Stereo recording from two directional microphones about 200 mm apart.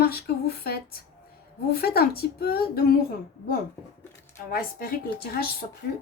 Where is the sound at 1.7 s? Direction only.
50° left (ahead or behind).